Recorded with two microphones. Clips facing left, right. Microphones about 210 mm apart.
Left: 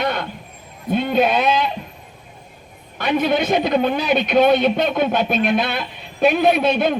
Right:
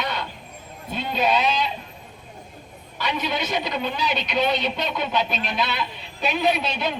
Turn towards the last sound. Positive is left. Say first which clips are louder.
# left 7 dB
turn(degrees=55)  # may be behind; listen again after turning